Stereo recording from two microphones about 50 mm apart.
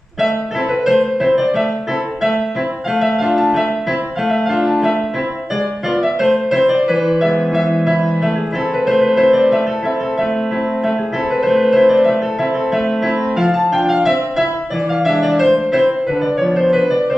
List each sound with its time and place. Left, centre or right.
1.2 s music: centre
3.0 s music: centre
5.9 s music: centre
11.4 s music: centre
13.4 s music: centre